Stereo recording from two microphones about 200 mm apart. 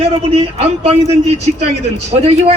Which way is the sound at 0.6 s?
30° right (ahead or behind).